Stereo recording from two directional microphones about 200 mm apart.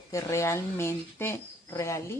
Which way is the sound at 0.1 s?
15° left (ahead or behind).